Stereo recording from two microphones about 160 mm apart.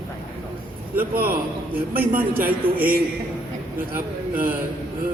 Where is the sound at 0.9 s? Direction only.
65° right (ahead or behind).